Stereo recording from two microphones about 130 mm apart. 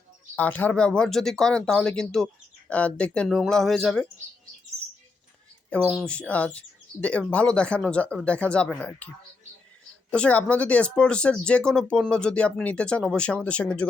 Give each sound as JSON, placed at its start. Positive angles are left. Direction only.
{"t": 0.3, "sound": "speech", "side_deg": 10}
{"t": 3.2, "sound": "speech", "side_deg": 0}
{"t": 5.9, "sound": "speech", "side_deg": 5}